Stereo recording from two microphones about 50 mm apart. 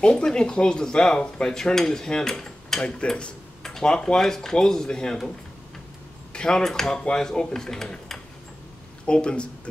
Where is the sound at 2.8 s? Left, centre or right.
Left.